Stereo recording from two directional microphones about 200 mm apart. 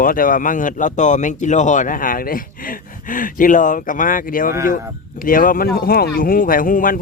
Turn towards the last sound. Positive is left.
turn(degrees=45)  # may be behind; listen again after turning